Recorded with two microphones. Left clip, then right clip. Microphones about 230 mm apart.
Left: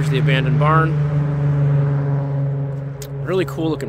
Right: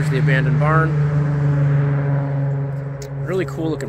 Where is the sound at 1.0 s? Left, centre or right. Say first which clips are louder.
Right 1 dB; right.